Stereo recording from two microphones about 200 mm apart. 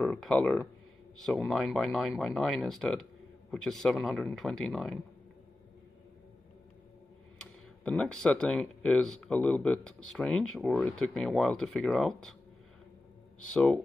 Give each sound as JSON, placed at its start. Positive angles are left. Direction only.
{"t": 0.0, "sound": "speech", "side_deg": 0}
{"t": 7.3, "sound": "speech", "side_deg": 5}
{"t": 13.5, "sound": "speech", "side_deg": 5}